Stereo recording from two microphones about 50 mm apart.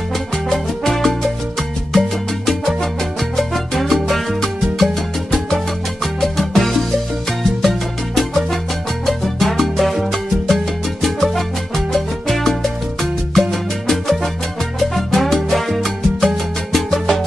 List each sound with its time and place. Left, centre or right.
0.5 s music: centre
3.3 s salsa music: centre
6.2 s music: centre
9.0 s salsa music: centre